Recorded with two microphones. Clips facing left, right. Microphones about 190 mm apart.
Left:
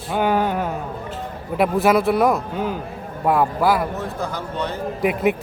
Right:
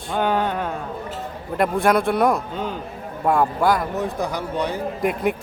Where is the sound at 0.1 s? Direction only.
10° left (ahead or behind).